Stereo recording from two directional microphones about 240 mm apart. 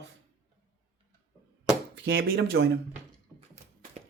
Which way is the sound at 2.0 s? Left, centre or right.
Right.